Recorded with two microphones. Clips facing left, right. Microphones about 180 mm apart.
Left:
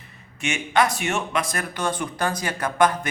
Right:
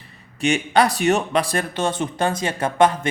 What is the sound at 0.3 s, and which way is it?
Speech, 35° right (ahead or behind).